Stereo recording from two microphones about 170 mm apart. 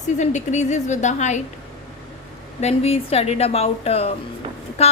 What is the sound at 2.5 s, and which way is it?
A woman's voice, 40° left (ahead or behind).